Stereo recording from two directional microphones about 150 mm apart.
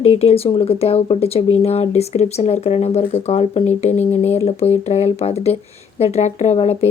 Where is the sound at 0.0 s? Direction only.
40° left (ahead or behind).